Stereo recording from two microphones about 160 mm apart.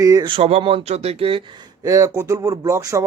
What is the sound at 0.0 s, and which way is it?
Speech, 20° right (ahead or behind).